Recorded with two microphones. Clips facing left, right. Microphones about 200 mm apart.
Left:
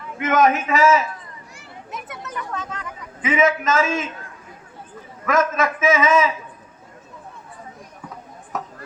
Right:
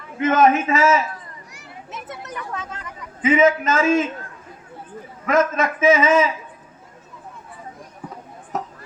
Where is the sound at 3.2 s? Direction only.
30° right (ahead or behind).